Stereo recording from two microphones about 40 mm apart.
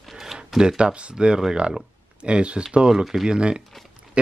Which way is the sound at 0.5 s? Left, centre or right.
Right.